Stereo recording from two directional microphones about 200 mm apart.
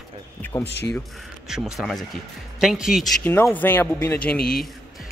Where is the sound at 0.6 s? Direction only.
60° left (ahead or behind).